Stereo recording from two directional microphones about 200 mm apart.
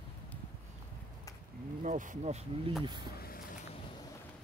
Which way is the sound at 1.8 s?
40° right (ahead or behind).